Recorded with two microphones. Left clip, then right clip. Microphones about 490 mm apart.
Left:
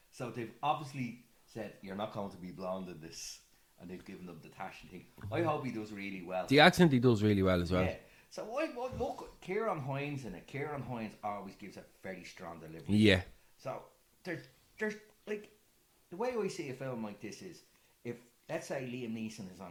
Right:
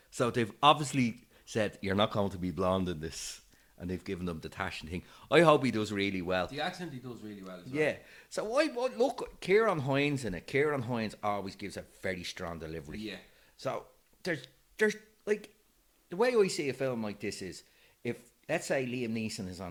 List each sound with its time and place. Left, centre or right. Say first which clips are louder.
0.2 s speech: right 11 dB; right
6.5 s speech: left 13 dB; left
7.8 s speech: right 4 dB; right
14.2 s speech: right 7 dB; right